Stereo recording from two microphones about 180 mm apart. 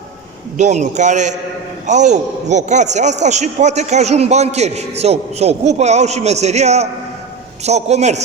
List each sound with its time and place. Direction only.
0.5 s a man's voice: 40° right (ahead or behind)